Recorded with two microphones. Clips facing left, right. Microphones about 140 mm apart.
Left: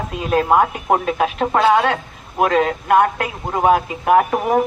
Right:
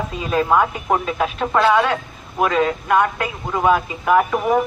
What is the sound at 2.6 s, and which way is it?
Speech, 45° left (ahead or behind).